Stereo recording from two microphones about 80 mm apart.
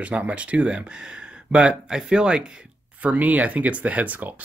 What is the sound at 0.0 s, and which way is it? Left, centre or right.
Speech, centre.